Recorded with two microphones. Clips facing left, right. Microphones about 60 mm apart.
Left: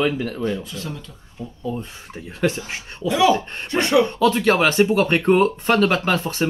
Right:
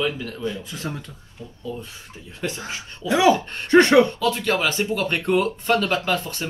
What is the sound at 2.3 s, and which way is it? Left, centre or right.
Speech, left.